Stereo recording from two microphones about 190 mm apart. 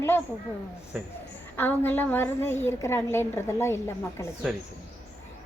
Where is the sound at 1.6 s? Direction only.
10° left (ahead or behind).